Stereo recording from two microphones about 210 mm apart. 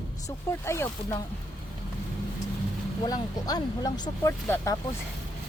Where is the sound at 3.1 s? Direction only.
20° left (ahead or behind).